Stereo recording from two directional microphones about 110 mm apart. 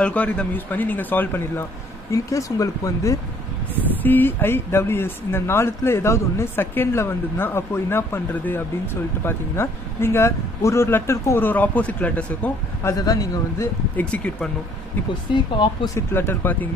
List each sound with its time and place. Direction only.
0.0 s speech: 10° left (ahead or behind); by 3.2 s 30° left (ahead or behind)
4.0 s speech: 20° left (ahead or behind)
12.9 s speech: 35° left (ahead or behind)
13.9 s speech: 10° left (ahead or behind)
15.3 s speech: 45° left (ahead or behind)
16.1 s speech: 20° left (ahead or behind)